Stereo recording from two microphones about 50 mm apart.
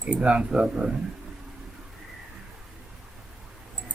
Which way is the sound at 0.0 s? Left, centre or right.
Right.